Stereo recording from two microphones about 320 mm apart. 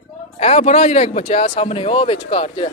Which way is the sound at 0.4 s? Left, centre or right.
Centre.